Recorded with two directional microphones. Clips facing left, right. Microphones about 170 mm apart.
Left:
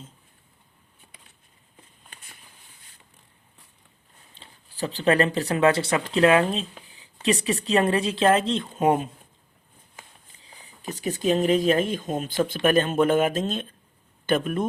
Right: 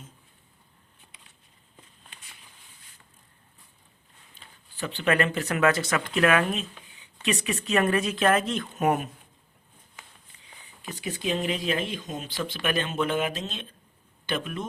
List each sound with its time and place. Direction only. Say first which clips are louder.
4.4 s speech: left 5 dB; 35° left (ahead or behind); by 14.7 s 50° left (ahead or behind)